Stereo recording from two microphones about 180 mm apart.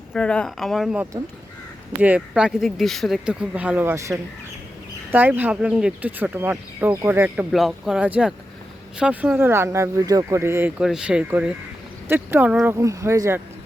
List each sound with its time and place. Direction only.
0.1 s speech: 5° left (ahead or behind); by 7.4 s 10° right (ahead or behind)
7.5 s speech: centre (ahead or behind)